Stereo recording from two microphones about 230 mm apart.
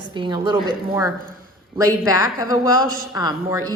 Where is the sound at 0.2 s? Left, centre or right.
Centre.